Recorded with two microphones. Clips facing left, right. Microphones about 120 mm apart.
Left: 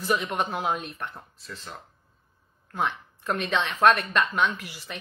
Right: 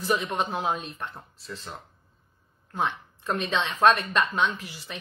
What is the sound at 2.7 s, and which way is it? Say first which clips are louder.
Speech: even; 15° right (ahead or behind).